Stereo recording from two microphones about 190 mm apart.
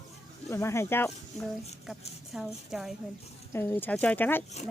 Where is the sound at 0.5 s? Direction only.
15° left (ahead or behind).